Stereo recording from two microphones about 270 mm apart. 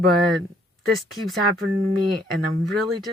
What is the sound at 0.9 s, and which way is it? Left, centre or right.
Speech, centre.